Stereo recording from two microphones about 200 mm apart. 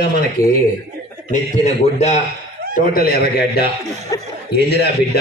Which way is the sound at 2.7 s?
45° left (ahead or behind).